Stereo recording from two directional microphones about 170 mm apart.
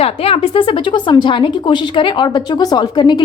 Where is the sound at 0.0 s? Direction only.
35° left (ahead or behind).